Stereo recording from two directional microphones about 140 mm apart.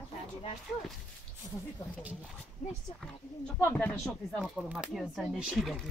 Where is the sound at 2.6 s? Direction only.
60° left (ahead or behind).